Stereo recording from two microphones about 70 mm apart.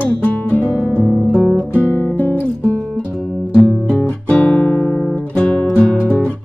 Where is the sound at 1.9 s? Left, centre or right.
Left.